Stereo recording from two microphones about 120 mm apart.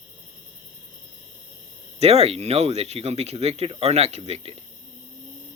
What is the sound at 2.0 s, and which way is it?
Speech, 60° right (ahead or behind).